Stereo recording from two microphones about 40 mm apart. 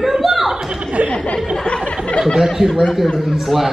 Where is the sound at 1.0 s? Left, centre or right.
Left.